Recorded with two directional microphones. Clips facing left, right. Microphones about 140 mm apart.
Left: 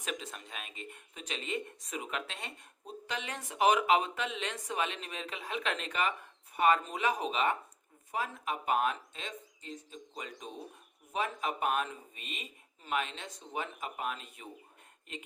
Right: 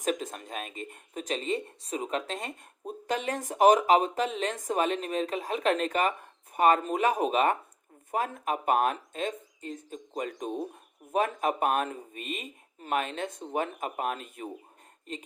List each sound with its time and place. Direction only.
0.0 s speech: 45° right (ahead or behind)